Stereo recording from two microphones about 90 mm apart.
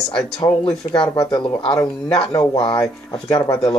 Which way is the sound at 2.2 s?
75° left (ahead or behind).